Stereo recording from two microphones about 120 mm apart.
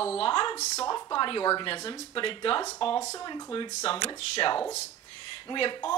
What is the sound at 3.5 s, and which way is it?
Speech, 45° left (ahead or behind).